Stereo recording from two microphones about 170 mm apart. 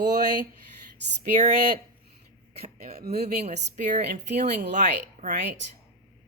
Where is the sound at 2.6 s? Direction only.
40° right (ahead or behind).